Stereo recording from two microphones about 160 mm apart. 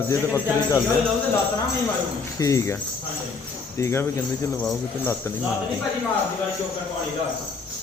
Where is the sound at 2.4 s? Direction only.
20° left (ahead or behind).